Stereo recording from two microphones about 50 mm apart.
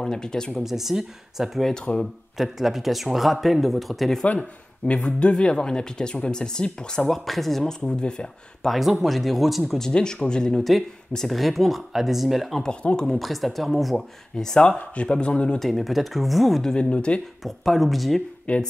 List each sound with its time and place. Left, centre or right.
0.0 s speech: centre
0.6 s speech: centre
4.2 s speech: left
8.6 s speech: centre
9.8 s speech: centre
11.1 s speech: centre
12.6 s speech: centre
13.2 s speech: centre
14.3 s speech: centre
14.8 s speech: left
15.6 s speech: centre
16.6 s speech: centre
17.4 s speech: centre
18.5 s speech: left